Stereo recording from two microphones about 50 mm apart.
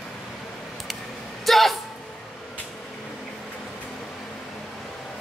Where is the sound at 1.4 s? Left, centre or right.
Centre.